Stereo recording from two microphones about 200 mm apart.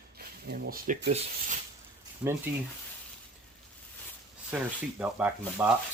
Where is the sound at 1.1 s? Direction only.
30° right (ahead or behind).